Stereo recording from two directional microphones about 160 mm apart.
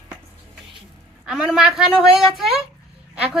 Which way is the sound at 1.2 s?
5° right (ahead or behind).